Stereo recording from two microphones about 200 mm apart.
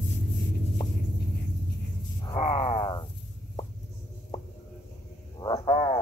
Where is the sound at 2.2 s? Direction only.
30° left (ahead or behind).